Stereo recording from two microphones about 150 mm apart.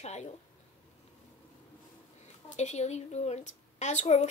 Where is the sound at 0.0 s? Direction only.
45° left (ahead or behind).